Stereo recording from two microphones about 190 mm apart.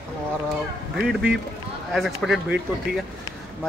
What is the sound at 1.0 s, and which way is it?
Speech, centre (ahead or behind).